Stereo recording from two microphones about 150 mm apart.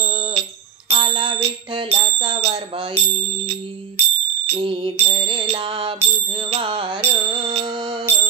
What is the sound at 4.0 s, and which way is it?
Music, 40° right (ahead or behind).